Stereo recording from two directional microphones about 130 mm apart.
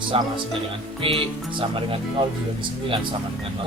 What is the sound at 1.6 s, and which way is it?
Speech, 45° right (ahead or behind).